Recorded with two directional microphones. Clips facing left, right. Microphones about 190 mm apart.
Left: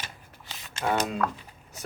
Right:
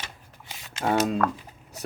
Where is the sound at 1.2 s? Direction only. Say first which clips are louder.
Right 3 dB; 55° right (ahead or behind).